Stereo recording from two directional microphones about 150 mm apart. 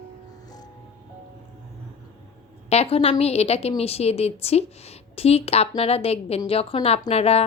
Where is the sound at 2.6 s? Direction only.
40° left (ahead or behind).